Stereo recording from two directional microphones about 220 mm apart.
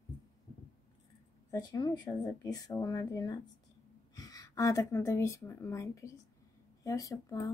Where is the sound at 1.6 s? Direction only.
20° left (ahead or behind).